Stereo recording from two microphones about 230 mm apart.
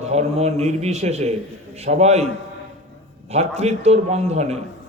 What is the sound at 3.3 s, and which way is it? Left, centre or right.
A man's voice, right.